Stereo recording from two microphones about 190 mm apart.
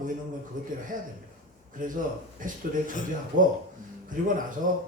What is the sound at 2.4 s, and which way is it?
Speech, 45° right (ahead or behind).